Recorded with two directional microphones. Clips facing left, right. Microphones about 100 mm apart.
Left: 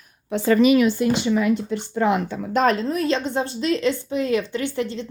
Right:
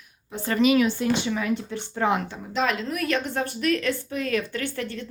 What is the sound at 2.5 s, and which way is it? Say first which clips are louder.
A woman's voice: left 6 dB; 40° left (ahead or behind).